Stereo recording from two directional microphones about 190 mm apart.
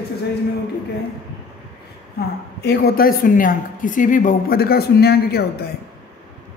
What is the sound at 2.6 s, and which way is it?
A woman's voice, 55° left (ahead or behind).